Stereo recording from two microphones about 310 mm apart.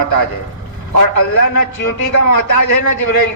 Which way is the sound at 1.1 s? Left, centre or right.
Left.